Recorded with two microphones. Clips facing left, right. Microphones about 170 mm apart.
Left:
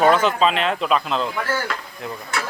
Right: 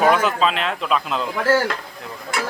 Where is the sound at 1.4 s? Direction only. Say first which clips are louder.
Right 7 dB; 90° right.